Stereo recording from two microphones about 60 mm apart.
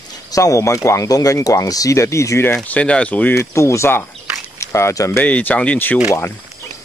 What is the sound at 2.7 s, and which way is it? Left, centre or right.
Speech, centre.